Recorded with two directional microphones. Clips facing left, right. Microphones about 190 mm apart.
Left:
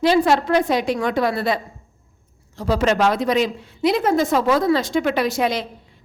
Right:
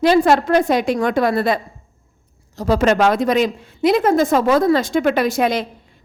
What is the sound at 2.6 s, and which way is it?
A woman's voice, 50° right (ahead or behind).